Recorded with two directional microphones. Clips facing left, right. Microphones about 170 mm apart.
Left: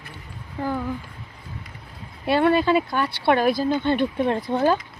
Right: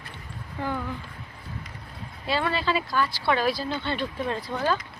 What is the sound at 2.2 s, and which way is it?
Speech, 55° left (ahead or behind).